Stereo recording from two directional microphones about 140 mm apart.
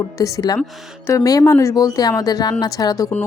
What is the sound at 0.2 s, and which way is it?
Speech, 25° left (ahead or behind).